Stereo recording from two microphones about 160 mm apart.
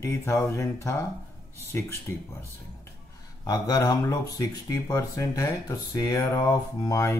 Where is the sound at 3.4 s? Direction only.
25° left (ahead or behind).